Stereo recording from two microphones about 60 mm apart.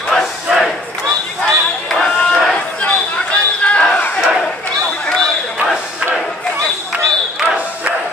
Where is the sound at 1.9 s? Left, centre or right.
Centre.